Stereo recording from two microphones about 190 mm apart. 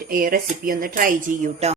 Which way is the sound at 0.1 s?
50° right (ahead or behind).